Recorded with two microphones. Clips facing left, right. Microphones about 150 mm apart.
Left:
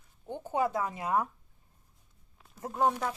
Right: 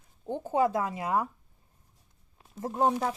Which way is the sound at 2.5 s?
25° right (ahead or behind).